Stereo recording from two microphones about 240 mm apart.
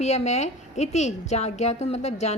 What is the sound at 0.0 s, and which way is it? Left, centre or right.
A woman's voice, left.